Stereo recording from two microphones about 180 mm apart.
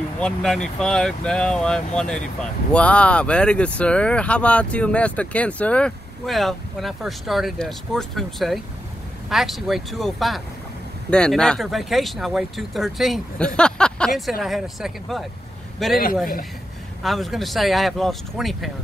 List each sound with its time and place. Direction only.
0.2 s speech: 5° left (ahead or behind)
17.0 s speech: centre (ahead or behind)